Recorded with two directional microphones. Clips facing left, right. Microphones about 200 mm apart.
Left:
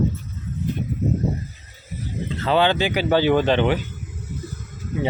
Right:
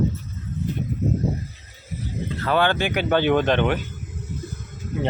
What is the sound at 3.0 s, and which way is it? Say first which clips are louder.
Speech: left 1 dB; 5° left (ahead or behind).